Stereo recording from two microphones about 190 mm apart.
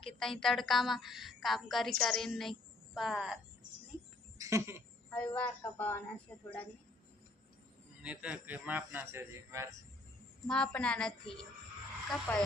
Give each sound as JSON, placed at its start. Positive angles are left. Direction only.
{"t": 0.0, "sound": "a woman's voice", "side_deg": 0}
{"t": 4.4, "sound": "a sound", "side_deg": -15}
{"t": 5.1, "sound": "speech", "side_deg": 5}
{"t": 8.0, "sound": "speech", "side_deg": -5}
{"t": 10.4, "sound": "a woman's voice", "side_deg": 5}